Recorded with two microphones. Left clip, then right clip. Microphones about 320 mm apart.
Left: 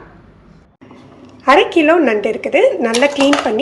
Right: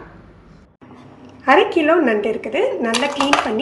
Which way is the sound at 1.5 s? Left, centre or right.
Centre.